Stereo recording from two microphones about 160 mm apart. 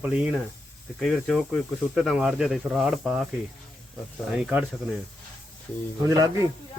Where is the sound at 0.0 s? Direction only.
5° right (ahead or behind).